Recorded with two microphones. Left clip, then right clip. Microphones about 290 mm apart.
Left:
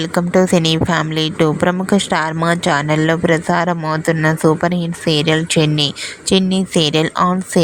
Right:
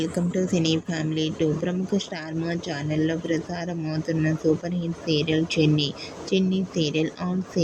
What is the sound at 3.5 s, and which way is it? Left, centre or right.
Speech, left.